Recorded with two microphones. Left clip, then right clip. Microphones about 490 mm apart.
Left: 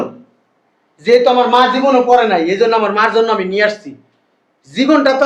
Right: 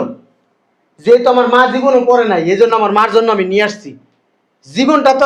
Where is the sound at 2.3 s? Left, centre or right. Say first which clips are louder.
Right 2 dB; right.